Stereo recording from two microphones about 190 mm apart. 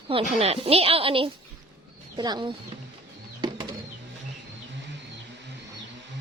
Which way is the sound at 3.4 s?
25° right (ahead or behind).